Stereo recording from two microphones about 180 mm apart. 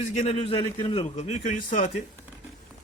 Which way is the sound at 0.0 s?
40° left (ahead or behind).